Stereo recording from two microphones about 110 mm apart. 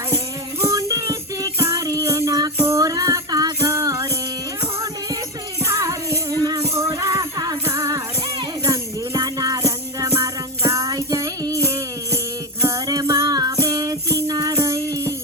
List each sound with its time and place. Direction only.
0.7 s music: 30° right (ahead or behind)
5.6 s music: 30° right (ahead or behind)
10.1 s music: 20° right (ahead or behind)